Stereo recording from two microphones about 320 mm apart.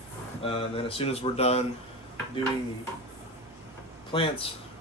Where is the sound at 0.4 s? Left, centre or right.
Centre.